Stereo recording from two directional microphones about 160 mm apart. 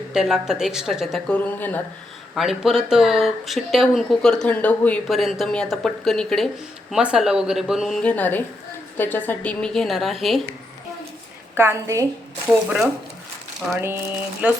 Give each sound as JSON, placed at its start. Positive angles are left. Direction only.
{"t": 0.1, "sound": "speech", "side_deg": -5}
{"t": 1.5, "sound": "a woman's voice", "side_deg": 10}
{"t": 2.3, "sound": "speech", "side_deg": 0}
{"t": 8.0, "sound": "a woman's voice", "side_deg": 10}
{"t": 11.5, "sound": "a woman's voice", "side_deg": -15}